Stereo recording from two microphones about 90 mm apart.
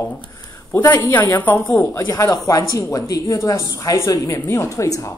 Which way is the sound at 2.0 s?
35° left (ahead or behind).